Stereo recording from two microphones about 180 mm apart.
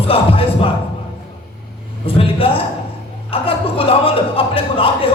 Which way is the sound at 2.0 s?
30° left (ahead or behind).